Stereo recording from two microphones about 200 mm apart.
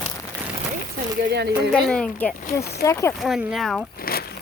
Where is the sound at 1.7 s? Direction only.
5° left (ahead or behind).